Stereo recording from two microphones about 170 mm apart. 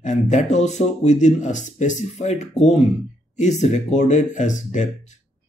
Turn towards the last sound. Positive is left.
turn(degrees=45)  # may be behind; listen again after turning